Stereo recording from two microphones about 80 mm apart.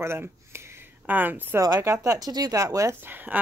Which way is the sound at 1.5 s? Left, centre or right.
Right.